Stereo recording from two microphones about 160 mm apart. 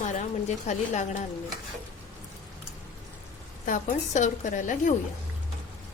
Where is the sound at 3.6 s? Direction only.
55° left (ahead or behind).